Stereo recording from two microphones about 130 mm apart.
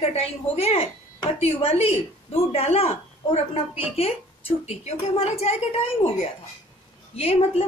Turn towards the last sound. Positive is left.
turn(degrees=50)  # may be behind; listen again after turning